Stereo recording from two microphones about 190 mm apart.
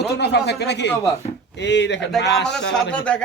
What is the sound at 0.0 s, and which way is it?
Speech, 60° left (ahead or behind).